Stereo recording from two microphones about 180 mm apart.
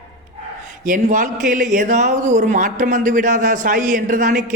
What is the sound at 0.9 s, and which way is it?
Speech, 45° right (ahead or behind).